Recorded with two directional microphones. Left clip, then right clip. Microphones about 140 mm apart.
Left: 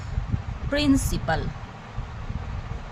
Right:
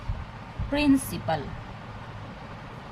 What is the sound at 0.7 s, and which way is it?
Speech, 30° left (ahead or behind).